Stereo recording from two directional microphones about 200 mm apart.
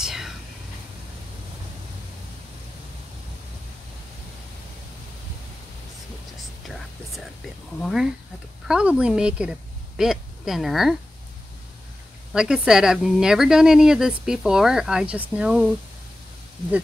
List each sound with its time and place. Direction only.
0.0 s whispering: centre (ahead or behind)
7.8 s speech: centre (ahead or behind)
12.3 s speech: 5° right (ahead or behind)